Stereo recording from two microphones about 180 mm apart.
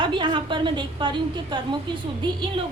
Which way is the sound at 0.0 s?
25° right (ahead or behind).